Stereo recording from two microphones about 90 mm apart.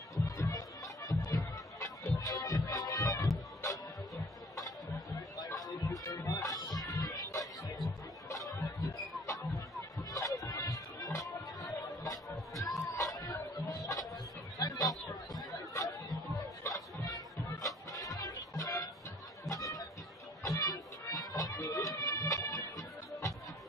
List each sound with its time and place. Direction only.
0.4 s music: 40° left (ahead or behind)
5.4 s music: 40° left (ahead or behind)
8.3 s music: 40° left (ahead or behind)
17.6 s music: 40° left (ahead or behind)
19.4 s chatter: 40° left (ahead or behind)
20.4 s music: 40° left (ahead or behind)